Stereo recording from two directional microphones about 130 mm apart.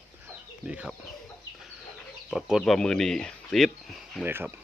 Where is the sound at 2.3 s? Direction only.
Centre (ahead or behind).